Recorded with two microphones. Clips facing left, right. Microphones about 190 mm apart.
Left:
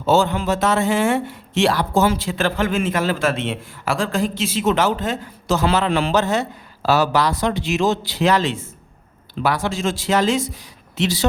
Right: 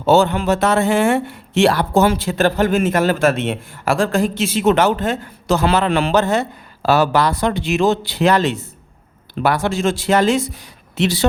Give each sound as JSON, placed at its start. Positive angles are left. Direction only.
{"t": 0.0, "sound": "a man's voice", "side_deg": -65}
{"t": 2.3, "sound": "a man's voice", "side_deg": -40}
{"t": 2.9, "sound": "a man's voice", "side_deg": -55}